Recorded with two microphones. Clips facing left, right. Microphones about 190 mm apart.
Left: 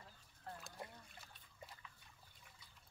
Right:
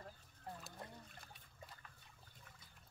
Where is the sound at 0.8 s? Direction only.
10° left (ahead or behind).